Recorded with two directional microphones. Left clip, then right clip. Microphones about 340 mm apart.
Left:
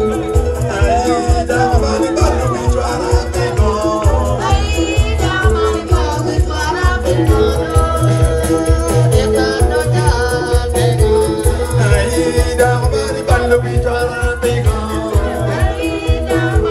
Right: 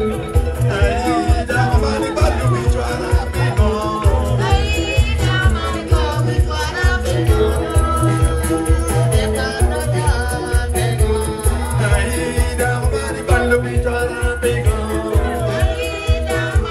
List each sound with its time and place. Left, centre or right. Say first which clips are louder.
1.0 s music: left 3 dB; centre
7.1 s music: left 5 dB; left
8.9 s music: left 6 dB; left
13.3 s music: left 2 dB; left